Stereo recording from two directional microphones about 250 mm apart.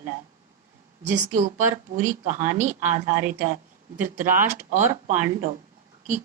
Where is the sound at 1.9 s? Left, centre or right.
Right.